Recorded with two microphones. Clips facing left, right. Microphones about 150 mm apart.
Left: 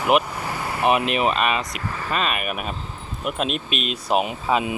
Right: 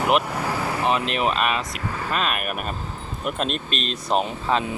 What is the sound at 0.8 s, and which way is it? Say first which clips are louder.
Speech: left 5 dB; 15° left (ahead or behind).